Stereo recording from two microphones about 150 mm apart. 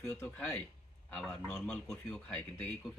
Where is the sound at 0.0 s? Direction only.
15° left (ahead or behind).